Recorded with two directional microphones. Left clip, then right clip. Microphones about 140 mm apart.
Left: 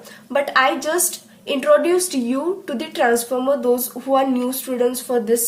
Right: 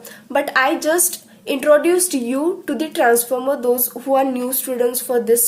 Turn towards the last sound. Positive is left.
turn(degrees=-35)  # may be behind; listen again after turning